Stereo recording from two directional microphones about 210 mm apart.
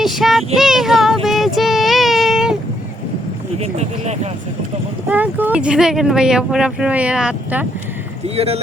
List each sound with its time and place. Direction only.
0.0 s child singing: centre (ahead or behind)
3.6 s speech: 30° right (ahead or behind)
5.0 s speech: 10° right (ahead or behind)
8.4 s speech: 30° right (ahead or behind)